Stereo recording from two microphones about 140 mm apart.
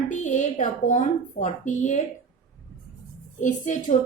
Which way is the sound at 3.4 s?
65° left (ahead or behind).